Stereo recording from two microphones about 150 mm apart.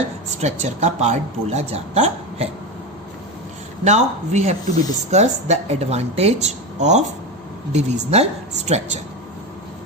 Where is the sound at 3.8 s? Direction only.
50° right (ahead or behind).